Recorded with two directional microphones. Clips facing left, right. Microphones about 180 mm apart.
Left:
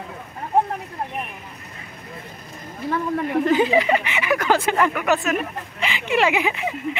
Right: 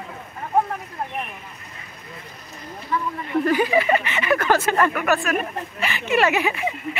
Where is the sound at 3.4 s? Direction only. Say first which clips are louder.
Left 1 dB; 20° left (ahead or behind).